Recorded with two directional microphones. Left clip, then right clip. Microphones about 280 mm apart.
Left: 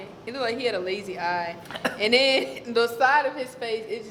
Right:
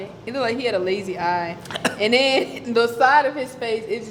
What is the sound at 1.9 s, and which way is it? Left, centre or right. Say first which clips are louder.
A woman's voice: right 2 dB; right.